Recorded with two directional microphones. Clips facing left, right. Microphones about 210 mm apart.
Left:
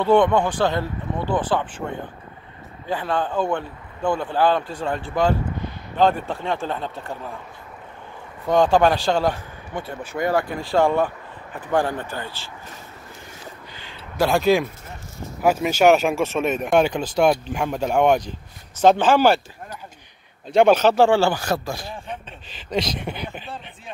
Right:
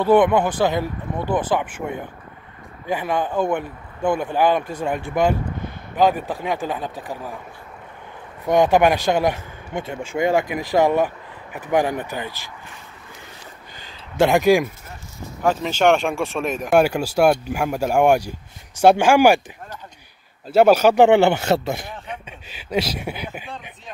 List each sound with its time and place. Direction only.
0.0 s speech: 10° right (ahead or behind)
8.5 s speech: 15° right (ahead or behind)
14.1 s speech: 20° right (ahead or behind)
15.4 s speech: 10° left (ahead or behind); by 19.4 s 10° right (ahead or behind)
20.4 s speech: 5° right (ahead or behind)
22.0 s speech: 10° right (ahead or behind)